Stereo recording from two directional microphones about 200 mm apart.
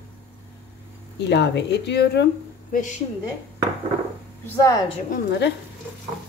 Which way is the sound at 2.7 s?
40° left (ahead or behind).